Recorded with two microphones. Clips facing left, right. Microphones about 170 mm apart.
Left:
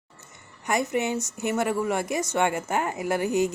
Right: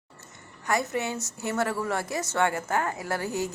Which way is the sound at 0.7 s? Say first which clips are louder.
Left 3 dB; 20° left (ahead or behind).